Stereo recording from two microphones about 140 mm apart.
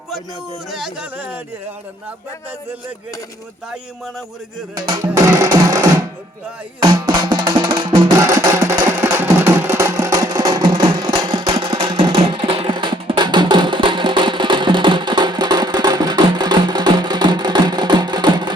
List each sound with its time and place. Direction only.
0.7 s speech: 5° right (ahead or behind)
4.7 s music: 25° right (ahead or behind)
6.8 s music: 30° right (ahead or behind)
8.2 s music: 20° right (ahead or behind)